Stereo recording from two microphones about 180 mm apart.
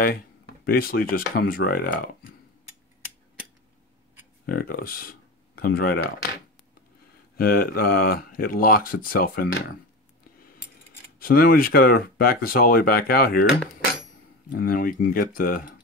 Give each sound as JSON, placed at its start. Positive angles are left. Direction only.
{"t": 0.7, "sound": "speech", "side_deg": 55}
{"t": 4.5, "sound": "speech", "side_deg": 55}
{"t": 7.3, "sound": "speech", "side_deg": 55}
{"t": 11.1, "sound": "speech", "side_deg": 55}
{"t": 14.5, "sound": "speech", "side_deg": 55}